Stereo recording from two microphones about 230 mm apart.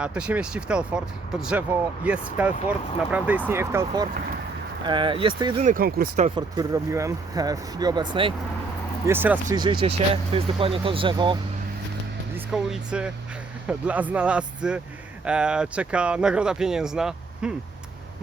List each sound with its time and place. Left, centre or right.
0.0 s speech: centre; by 5.6 s right
5.6 s speech: right
6.3 s speech: centre
9.0 s speech: centre
9.8 s speech: right
12.5 s speech: centre